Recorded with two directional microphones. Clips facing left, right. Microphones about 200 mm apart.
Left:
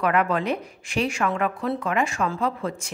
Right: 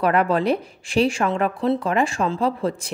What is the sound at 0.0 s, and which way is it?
Speech, 35° right (ahead or behind).